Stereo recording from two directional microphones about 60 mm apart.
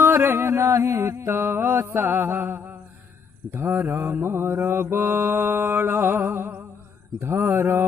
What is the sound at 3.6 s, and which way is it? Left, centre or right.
Mantra, right.